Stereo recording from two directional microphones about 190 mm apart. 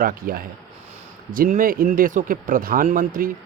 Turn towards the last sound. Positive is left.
turn(degrees=-45)  # may be behind; listen again after turning